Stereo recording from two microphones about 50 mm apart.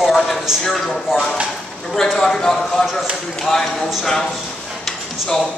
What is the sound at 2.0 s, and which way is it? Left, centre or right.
Speech, centre.